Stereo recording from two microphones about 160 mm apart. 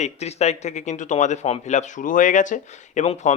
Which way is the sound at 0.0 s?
45° left (ahead or behind).